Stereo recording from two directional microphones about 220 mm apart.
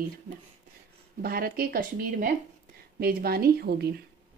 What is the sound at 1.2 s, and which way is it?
Speech, 40° right (ahead or behind).